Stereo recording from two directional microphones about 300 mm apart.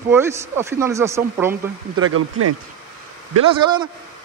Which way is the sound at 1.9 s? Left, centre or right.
Right.